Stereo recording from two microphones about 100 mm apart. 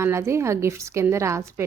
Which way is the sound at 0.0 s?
30° right (ahead or behind).